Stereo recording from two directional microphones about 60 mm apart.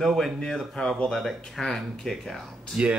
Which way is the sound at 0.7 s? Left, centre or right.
Centre.